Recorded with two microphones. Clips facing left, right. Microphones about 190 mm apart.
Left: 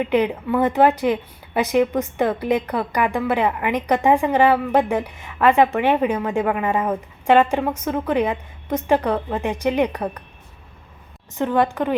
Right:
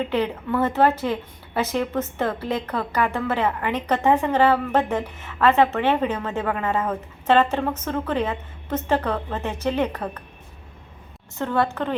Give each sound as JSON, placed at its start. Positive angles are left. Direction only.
{"t": 0.0, "sound": "a woman's voice", "side_deg": 15}
{"t": 11.3, "sound": "a woman's voice", "side_deg": 15}